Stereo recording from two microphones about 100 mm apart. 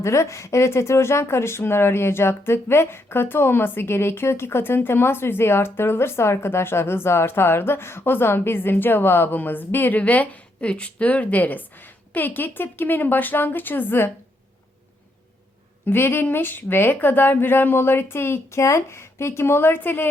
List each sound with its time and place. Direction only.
0.0 s speech: 30° left (ahead or behind)
15.9 s speech: 20° left (ahead or behind)